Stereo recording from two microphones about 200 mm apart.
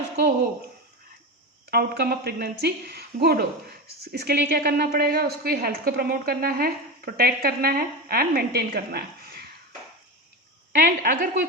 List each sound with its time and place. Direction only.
1.7 s a woman's voice: 50° right (ahead or behind)
10.8 s a woman's voice: 45° right (ahead or behind)